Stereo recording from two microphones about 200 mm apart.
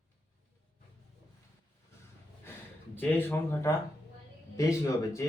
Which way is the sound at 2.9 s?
10° left (ahead or behind).